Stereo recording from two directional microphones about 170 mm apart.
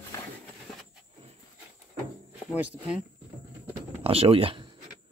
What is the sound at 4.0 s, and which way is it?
Speech, 35° right (ahead or behind).